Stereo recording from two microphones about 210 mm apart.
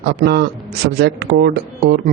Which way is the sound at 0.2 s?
50° right (ahead or behind).